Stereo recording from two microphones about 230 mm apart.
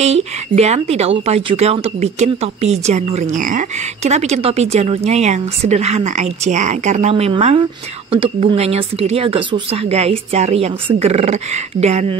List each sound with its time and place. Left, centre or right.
0.0 s speech: right